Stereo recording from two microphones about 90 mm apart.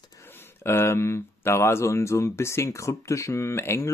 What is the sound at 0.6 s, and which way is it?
Speech, 25° left (ahead or behind).